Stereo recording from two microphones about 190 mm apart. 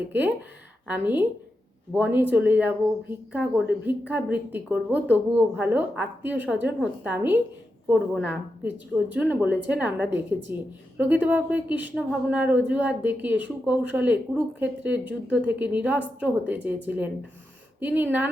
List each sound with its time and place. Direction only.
0.9 s a woman's voice: 10° right (ahead or behind)